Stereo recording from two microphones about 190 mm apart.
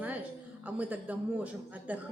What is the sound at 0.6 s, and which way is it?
A man's voice, 10° right (ahead or behind).